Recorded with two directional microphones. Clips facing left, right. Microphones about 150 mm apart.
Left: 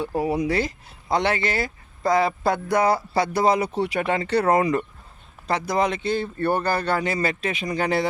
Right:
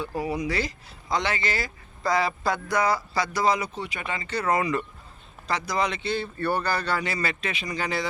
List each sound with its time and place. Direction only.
0.0 s speech: 55° left (ahead or behind)